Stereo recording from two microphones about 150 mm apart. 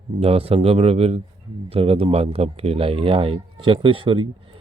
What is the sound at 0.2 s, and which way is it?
Speech, 40° right (ahead or behind).